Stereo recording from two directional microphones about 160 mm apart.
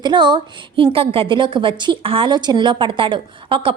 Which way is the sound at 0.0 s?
25° right (ahead or behind).